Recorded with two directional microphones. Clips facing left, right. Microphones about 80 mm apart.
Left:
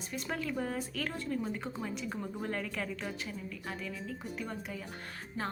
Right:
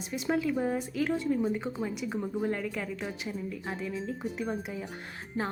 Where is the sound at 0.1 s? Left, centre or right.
Centre.